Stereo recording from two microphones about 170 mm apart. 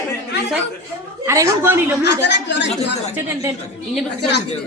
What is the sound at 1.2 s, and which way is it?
Speech, 15° right (ahead or behind).